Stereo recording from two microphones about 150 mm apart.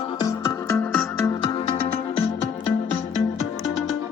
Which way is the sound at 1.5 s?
35° left (ahead or behind).